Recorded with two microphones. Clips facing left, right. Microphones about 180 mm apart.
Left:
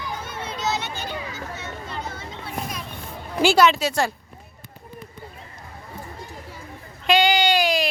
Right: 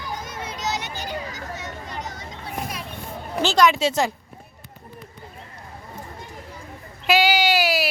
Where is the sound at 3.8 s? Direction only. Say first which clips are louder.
Right 2 dB; 20° right (ahead or behind).